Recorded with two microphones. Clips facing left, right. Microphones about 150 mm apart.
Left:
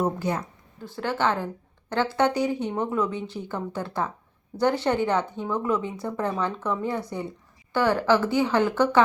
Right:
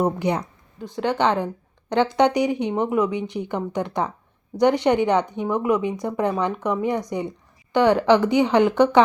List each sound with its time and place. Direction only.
0.0 s speech: 15° right (ahead or behind)